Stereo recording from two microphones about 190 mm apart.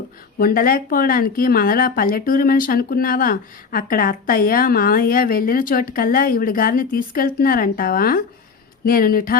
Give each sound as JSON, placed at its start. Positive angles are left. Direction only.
{"t": 0.3, "sound": "speech", "side_deg": 50}